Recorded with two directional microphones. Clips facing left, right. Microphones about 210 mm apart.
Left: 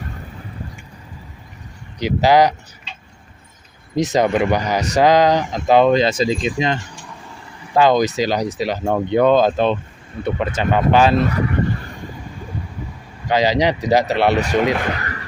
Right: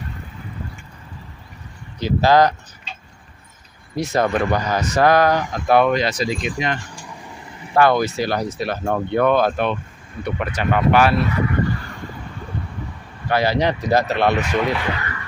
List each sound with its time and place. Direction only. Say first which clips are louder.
2.0 s speech: left 1 dB; 15° left (ahead or behind)
3.9 s speech: left 3 dB; 20° left (ahead or behind)
11.1 s fowl: left 3 dB; 45° left (ahead or behind)
13.2 s speech: left 2 dB; 15° left (ahead or behind)
14.7 s speech: left 2 dB; 40° left (ahead or behind)